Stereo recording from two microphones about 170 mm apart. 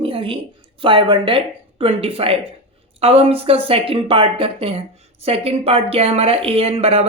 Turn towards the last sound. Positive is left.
turn(degrees=-35)  # may be behind; listen again after turning